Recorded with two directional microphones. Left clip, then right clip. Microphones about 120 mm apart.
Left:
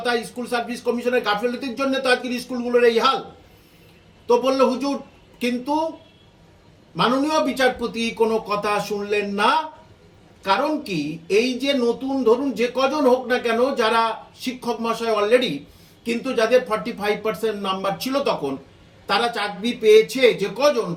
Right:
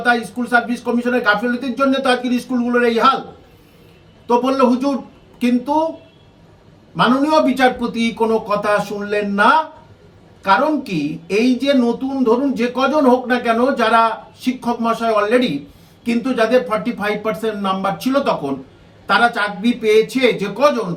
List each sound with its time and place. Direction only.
0.4 s speech: 10° right (ahead or behind)
4.3 s speech: 10° right (ahead or behind)
6.9 s speech: 10° right (ahead or behind)